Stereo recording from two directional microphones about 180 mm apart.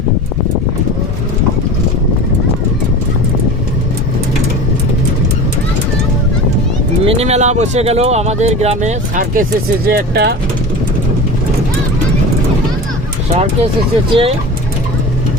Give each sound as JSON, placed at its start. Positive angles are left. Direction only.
{"t": 7.0, "sound": "speech", "side_deg": -35}
{"t": 13.3, "sound": "speech", "side_deg": -35}